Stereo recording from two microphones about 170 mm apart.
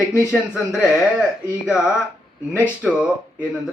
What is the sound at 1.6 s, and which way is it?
A man's voice, 5° right (ahead or behind).